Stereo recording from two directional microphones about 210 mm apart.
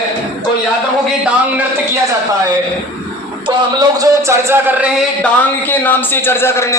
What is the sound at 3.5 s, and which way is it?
Speech, 15° right (ahead or behind).